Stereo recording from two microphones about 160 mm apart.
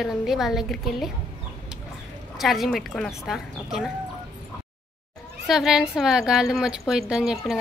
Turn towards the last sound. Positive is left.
turn(degrees=-5)  # may be behind; listen again after turning